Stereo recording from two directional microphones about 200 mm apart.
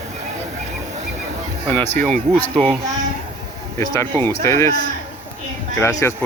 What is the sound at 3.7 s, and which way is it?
Speech, 15° left (ahead or behind).